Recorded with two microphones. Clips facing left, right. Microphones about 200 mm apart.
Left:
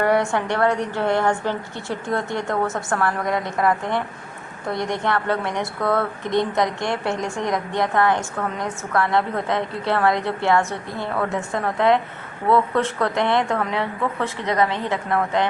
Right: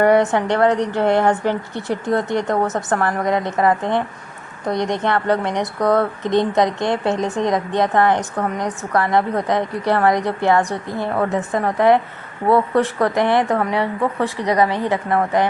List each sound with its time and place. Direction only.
0.0 s a woman's voice: 20° right (ahead or behind)